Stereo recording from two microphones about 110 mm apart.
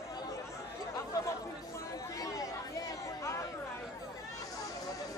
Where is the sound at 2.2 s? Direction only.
30° left (ahead or behind).